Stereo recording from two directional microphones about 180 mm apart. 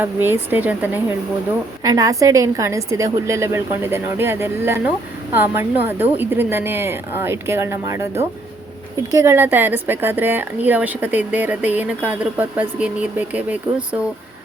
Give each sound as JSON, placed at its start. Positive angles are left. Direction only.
{"t": 0.0, "sound": "a woman's voice", "side_deg": -10}
{"t": 1.8, "sound": "a woman's voice", "side_deg": -20}
{"t": 9.0, "sound": "a woman's voice", "side_deg": -15}